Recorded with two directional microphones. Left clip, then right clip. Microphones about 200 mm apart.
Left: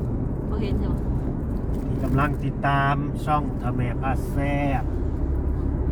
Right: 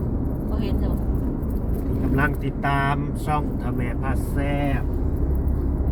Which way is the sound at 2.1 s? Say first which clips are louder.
Even; 20° left (ahead or behind).